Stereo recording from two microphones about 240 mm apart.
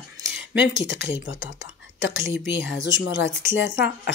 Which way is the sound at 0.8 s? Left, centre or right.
Left.